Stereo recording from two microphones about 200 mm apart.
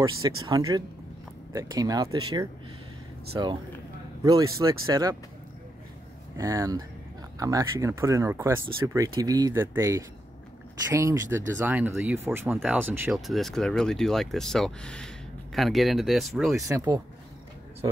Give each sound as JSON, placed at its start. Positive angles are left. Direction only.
{"t": 0.4, "sound": "speech", "side_deg": -15}
{"t": 2.0, "sound": "speech", "side_deg": -90}
{"t": 3.3, "sound": "speech", "side_deg": -20}
{"t": 6.3, "sound": "speech", "side_deg": -15}
{"t": 13.3, "sound": "speech", "side_deg": 0}
{"t": 16.6, "sound": "speech", "side_deg": -15}